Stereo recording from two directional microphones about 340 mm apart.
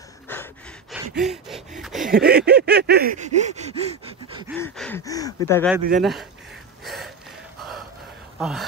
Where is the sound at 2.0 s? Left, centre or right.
Right.